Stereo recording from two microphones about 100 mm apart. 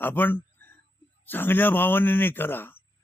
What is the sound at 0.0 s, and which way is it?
Speech, 20° left (ahead or behind).